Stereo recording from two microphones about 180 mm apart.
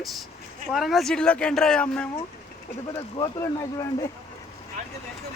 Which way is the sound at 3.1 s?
20° left (ahead or behind).